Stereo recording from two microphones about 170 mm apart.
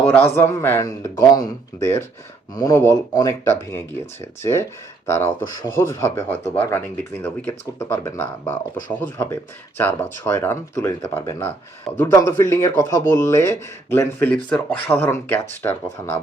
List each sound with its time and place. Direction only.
0.0 s speech: 10° left (ahead or behind)